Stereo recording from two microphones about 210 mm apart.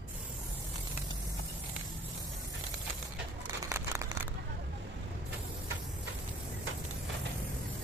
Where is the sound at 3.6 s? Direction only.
15° right (ahead or behind).